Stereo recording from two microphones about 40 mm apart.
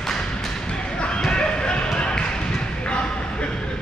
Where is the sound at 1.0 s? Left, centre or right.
Left.